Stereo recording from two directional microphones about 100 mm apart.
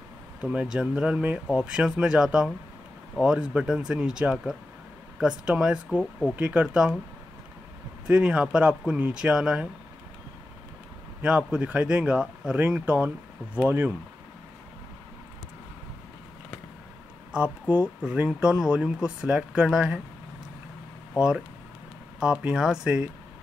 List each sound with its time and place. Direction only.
0.4 s speech: 10° right (ahead or behind)
8.1 s speech: 10° right (ahead or behind)
11.2 s speech: 10° right (ahead or behind)
17.3 s speech: 15° right (ahead or behind)
22.2 s speech: 10° right (ahead or behind)